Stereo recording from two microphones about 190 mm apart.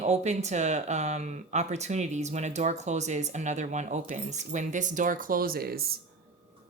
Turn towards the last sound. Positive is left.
turn(degrees=-55)  # may be behind; listen again after turning